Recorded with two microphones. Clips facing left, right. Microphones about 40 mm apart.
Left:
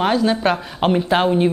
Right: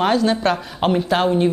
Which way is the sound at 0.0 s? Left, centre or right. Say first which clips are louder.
Even; centre.